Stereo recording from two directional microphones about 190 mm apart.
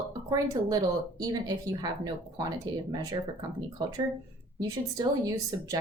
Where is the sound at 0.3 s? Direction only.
20° right (ahead or behind).